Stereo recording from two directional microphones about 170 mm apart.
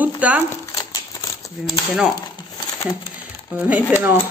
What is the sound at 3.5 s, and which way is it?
Speech, 10° right (ahead or behind).